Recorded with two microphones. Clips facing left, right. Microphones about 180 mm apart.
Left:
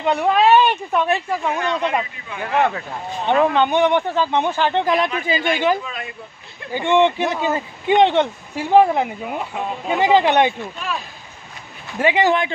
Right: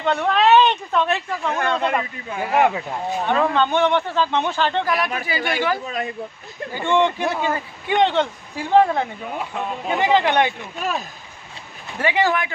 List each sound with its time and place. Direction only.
0.0 s a man's voice: 10° left (ahead or behind)
1.6 s speech: 55° right (ahead or behind)
2.5 s speech: 10° right (ahead or behind)
3.3 s a man's voice: 20° left (ahead or behind)
5.9 s speech: 40° right (ahead or behind)
6.7 s a man's voice: 20° left (ahead or behind)
10.8 s speech: 45° right (ahead or behind)
12.0 s a woman's voice: 20° left (ahead or behind)